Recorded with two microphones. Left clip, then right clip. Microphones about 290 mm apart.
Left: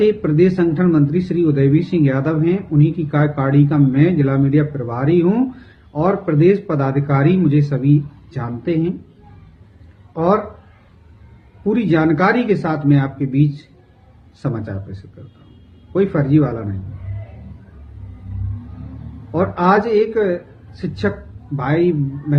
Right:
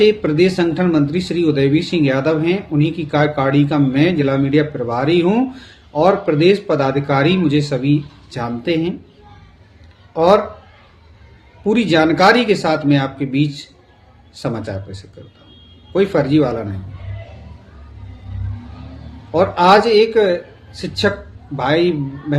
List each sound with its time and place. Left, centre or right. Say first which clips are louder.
0.0 s speech: right 2 dB; centre
10.2 s speech: right 5 dB; centre
11.7 s speech: right 2 dB; centre
15.9 s speech: right 2 dB; centre
19.3 s speech: right 4 dB; centre